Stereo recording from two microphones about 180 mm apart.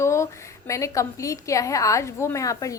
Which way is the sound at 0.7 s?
15° left (ahead or behind).